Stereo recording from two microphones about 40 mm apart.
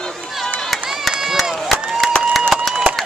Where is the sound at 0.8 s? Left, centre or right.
Centre.